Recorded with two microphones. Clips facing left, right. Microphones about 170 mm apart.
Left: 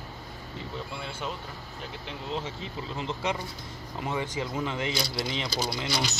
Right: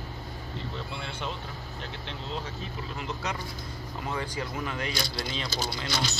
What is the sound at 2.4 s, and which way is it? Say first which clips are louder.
Speech: left 1 dB; 25° left (ahead or behind).